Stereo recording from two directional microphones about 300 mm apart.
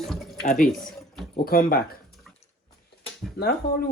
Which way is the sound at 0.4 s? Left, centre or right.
Left.